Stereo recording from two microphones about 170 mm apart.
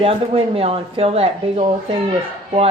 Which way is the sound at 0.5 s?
35° right (ahead or behind).